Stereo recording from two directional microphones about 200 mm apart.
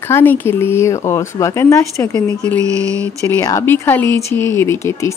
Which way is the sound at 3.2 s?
15° left (ahead or behind).